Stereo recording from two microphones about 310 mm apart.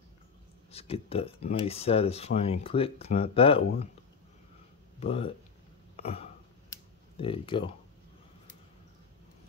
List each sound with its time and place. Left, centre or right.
0.7 s speech: centre
5.0 s speech: centre
5.9 s a sound: centre